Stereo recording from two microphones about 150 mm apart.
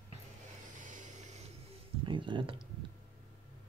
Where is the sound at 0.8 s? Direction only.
55° right (ahead or behind).